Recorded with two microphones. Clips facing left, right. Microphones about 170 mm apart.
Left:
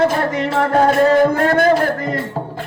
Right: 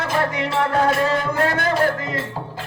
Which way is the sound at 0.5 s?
45° left (ahead or behind).